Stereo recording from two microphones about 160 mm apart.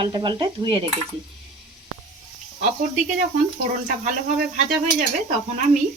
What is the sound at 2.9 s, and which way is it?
Speech, 55° right (ahead or behind).